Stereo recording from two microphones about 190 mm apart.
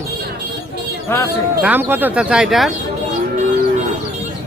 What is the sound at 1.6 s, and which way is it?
Speech, 10° right (ahead or behind).